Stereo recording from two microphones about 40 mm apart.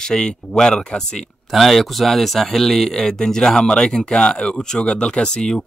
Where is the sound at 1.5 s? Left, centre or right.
Centre.